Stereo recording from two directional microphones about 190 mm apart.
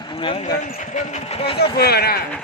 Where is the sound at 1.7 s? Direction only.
55° left (ahead or behind).